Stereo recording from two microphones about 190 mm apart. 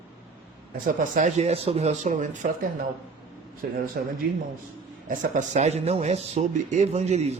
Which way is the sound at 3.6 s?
50° right (ahead or behind).